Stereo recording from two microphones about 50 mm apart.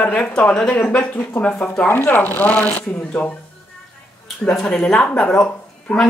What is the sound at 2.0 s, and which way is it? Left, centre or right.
Speech, left.